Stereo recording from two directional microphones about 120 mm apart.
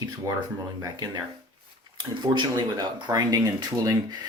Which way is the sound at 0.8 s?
35° right (ahead or behind).